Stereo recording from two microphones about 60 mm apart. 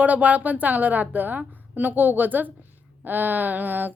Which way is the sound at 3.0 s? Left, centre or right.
Right.